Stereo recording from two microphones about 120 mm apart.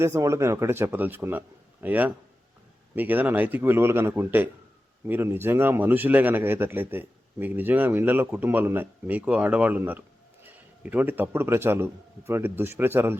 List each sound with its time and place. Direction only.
0.0 s a man's voice: 25° right (ahead or behind)